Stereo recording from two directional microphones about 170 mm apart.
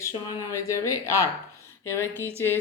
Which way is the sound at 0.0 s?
20° left (ahead or behind).